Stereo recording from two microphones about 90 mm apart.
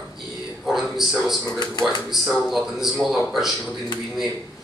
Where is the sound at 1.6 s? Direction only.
50° left (ahead or behind).